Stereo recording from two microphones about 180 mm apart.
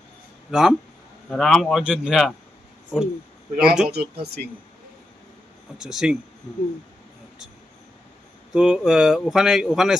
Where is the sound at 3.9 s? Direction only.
60° right (ahead or behind).